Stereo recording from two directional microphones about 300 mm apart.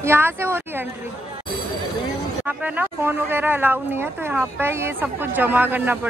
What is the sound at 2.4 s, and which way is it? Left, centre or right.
Speech, centre.